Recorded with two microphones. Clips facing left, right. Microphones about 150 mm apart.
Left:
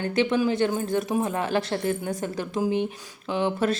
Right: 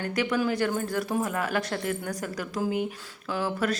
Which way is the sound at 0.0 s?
25° left (ahead or behind).